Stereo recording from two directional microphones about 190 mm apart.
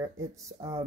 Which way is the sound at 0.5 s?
20° right (ahead or behind).